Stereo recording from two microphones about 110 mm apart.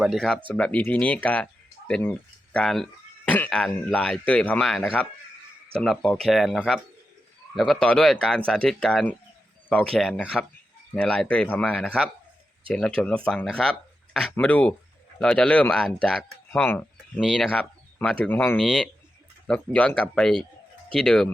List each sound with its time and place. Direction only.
0.0 s speech: centre (ahead or behind)
0.4 s speech: 10° left (ahead or behind)
4.6 s speech: centre (ahead or behind)
13.0 s speech: 10° left (ahead or behind)
16.6 s speech: 15° left (ahead or behind)
17.2 s speech: centre (ahead or behind); by 18.5 s 20° left (ahead or behind)
18.5 s speech: centre (ahead or behind)